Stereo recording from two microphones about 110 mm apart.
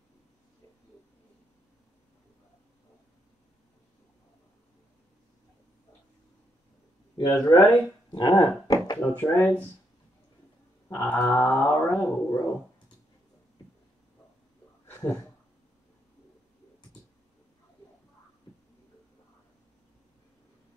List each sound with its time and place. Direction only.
7.2 s speech: 35° left (ahead or behind)
9.1 s speech: 15° left (ahead or behind)
10.9 s a sound: 20° left (ahead or behind)